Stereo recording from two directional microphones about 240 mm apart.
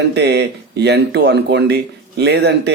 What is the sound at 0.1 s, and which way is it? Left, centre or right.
Speech, right.